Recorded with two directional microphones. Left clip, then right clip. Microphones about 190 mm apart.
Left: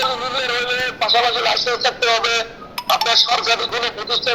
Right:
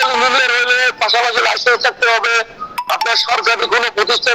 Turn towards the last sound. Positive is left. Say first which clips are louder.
# right 6 dB
turn(degrees=-50)  # may be behind; listen again after turning